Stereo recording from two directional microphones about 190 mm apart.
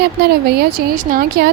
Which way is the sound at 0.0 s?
55° right (ahead or behind).